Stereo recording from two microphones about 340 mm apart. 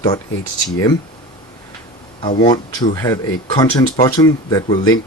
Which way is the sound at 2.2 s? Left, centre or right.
Centre.